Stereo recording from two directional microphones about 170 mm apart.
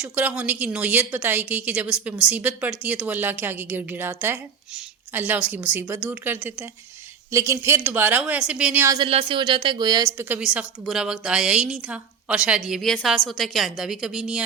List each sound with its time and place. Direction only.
0.0 s a woman's voice: 10° right (ahead or behind)
9.0 s speech: 35° right (ahead or behind)
10.2 s a woman's voice: 10° right (ahead or behind)